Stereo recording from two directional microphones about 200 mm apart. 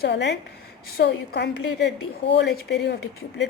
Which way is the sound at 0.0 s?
60° left (ahead or behind).